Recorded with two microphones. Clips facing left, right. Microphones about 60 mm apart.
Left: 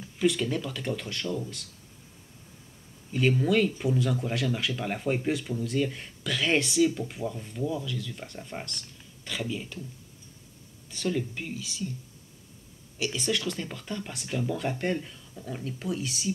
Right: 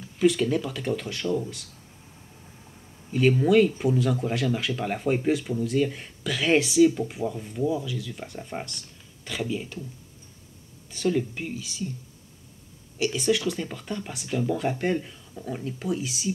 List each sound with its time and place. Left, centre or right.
0.2 s speech: centre
3.1 s speech: centre
10.9 s speech: centre
13.0 s speech: centre